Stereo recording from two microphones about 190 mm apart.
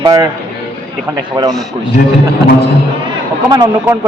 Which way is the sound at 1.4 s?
25° right (ahead or behind).